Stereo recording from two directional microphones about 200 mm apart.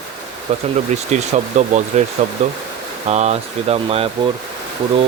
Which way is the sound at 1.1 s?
35° right (ahead or behind).